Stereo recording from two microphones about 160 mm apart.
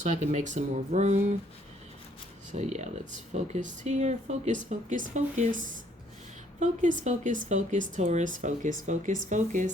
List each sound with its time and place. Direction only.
0.0 s speech: 50° right (ahead or behind)
2.5 s speech: 45° right (ahead or behind)